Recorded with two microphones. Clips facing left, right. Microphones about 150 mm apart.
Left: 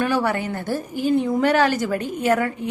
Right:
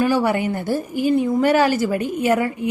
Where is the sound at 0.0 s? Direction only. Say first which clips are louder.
Right 3 dB; 10° right (ahead or behind).